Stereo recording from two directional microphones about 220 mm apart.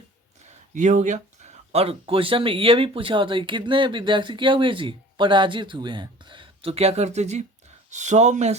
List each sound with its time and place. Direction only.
0.7 s speech: 35° right (ahead or behind)